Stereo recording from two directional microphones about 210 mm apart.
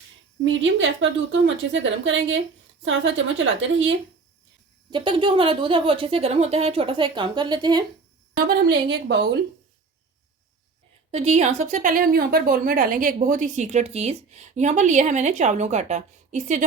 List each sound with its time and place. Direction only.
0.4 s a woman's voice: 60° right (ahead or behind)
4.9 s speech: 20° right (ahead or behind)
8.4 s a woman's voice: 50° right (ahead or behind)
11.1 s a woman's voice: 30° right (ahead or behind)